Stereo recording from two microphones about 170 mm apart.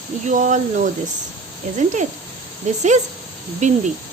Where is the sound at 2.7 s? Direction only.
45° right (ahead or behind).